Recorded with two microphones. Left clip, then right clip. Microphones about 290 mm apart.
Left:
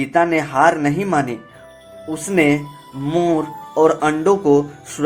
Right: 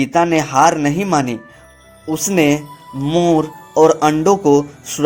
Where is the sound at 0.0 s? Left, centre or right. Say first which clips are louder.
Right 2 dB; right.